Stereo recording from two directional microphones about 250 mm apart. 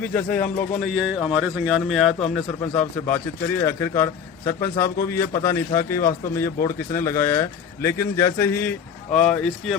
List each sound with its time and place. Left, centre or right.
0.4 s speech: left
0.8 s a man's voice: centre